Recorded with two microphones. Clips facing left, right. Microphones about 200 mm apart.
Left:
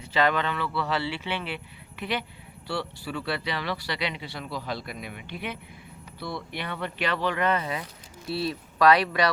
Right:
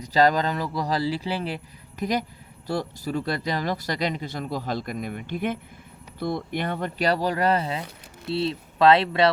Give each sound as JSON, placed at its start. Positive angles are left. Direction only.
{"t": 0.0, "sound": "speech", "side_deg": -40}